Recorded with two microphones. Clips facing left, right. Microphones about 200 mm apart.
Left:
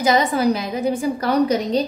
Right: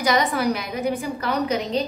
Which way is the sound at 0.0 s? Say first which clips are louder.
Left 4 dB; 30° left (ahead or behind).